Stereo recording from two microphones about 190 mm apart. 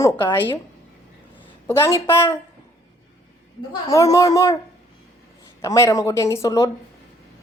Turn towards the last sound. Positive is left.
turn(degrees=15)  # may be behind; listen again after turning